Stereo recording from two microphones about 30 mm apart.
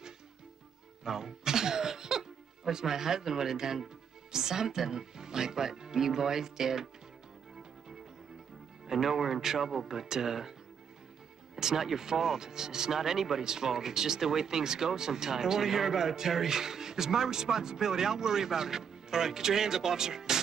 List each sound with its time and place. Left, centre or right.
1.0 s speech: centre
8.9 s speech: centre
11.5 s speech: centre